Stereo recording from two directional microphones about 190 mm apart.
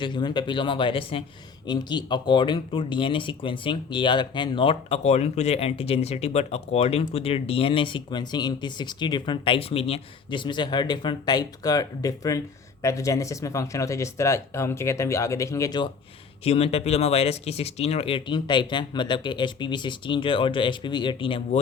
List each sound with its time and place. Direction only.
0.0 s speech: 25° left (ahead or behind)
16.4 s speech: 30° left (ahead or behind)